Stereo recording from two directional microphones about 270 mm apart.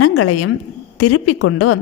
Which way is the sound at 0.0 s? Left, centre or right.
Left.